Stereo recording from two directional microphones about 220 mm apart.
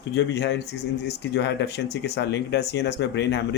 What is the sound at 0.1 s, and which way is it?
Speech, 50° left (ahead or behind).